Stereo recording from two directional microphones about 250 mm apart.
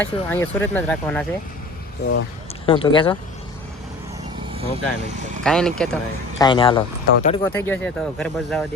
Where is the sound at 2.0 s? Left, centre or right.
Left.